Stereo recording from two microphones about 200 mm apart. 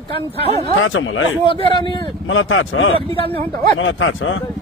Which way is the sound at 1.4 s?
25° left (ahead or behind).